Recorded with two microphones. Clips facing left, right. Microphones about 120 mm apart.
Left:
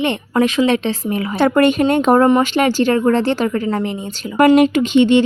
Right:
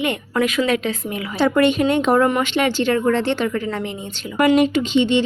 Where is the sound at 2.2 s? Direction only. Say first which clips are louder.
Left 5 dB; 35° left (ahead or behind).